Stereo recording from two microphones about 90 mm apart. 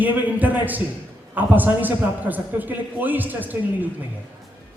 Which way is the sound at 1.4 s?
20° right (ahead or behind).